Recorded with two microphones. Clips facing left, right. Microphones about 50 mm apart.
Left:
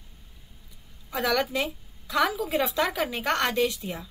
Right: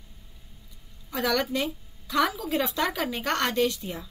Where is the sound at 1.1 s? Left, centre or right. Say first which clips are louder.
Left 1 dB; centre.